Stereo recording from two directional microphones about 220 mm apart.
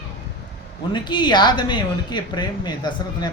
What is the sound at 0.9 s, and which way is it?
Speech, 20° left (ahead or behind).